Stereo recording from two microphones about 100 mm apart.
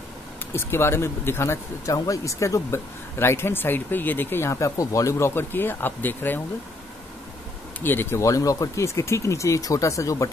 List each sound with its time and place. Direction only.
0.5 s speech: 25° left (ahead or behind)
7.8 s speech: 20° left (ahead or behind)